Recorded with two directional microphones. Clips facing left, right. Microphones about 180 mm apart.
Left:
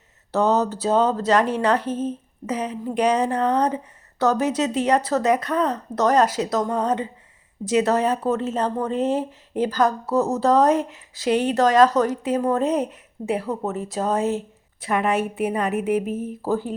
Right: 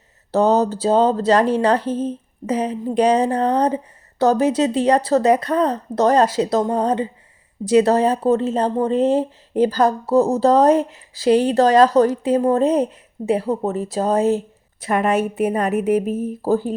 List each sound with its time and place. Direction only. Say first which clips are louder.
0.3 s speech: right 4 dB; 35° right (ahead or behind)